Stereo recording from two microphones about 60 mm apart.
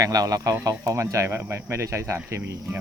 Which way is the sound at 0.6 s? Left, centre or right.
Right.